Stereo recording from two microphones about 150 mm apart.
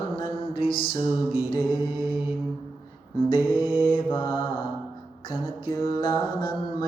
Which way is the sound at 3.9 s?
35° left (ahead or behind).